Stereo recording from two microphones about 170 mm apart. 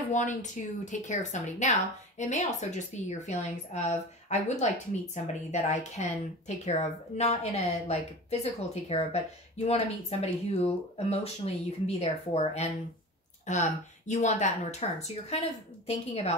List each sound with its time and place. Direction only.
0.1 s a woman's voice: 45° left (ahead or behind)